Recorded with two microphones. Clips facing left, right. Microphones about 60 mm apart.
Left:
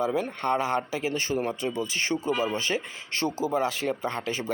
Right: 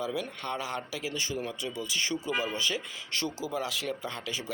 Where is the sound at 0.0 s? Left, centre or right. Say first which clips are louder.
Left 7 dB; left.